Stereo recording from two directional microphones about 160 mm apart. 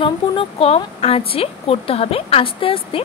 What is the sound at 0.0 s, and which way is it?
A woman's voice, 35° left (ahead or behind).